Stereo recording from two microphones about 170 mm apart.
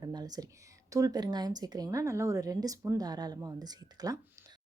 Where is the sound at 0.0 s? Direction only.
25° right (ahead or behind).